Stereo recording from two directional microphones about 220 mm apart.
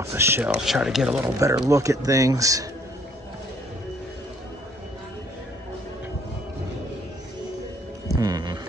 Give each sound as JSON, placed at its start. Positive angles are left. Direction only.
{"t": 0.0, "sound": "speech", "side_deg": -10}
{"t": 1.2, "sound": "speech", "side_deg": -15}
{"t": 8.1, "sound": "music", "side_deg": -15}